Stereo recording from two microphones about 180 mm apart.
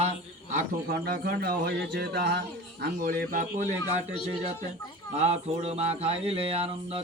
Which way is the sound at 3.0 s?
50° right (ahead or behind).